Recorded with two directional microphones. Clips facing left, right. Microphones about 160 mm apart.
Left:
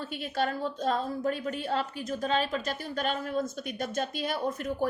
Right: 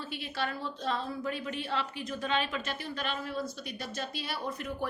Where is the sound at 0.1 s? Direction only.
45° left (ahead or behind).